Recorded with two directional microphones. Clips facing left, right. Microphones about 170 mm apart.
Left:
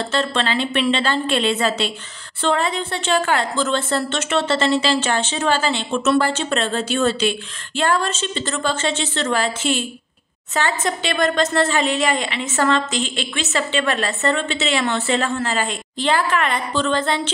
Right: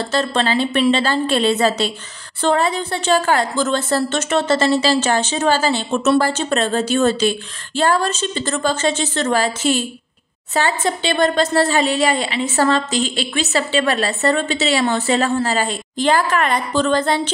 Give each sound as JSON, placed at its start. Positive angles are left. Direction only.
{"t": 0.1, "sound": "a woman's voice", "side_deg": -40}